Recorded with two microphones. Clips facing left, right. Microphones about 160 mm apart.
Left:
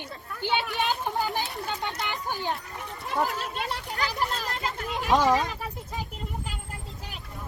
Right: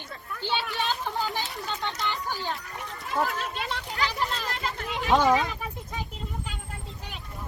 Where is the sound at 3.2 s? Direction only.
Centre (ahead or behind).